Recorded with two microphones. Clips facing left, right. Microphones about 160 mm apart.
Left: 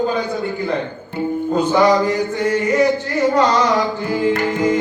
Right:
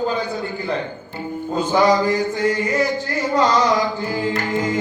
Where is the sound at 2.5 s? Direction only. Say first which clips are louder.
Left 5 dB; 20° left (ahead or behind).